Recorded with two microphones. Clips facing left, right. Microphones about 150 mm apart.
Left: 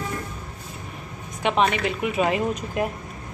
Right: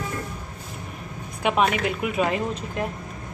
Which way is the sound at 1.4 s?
5° right (ahead or behind).